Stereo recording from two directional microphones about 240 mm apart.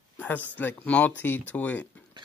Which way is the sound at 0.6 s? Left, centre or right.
Centre.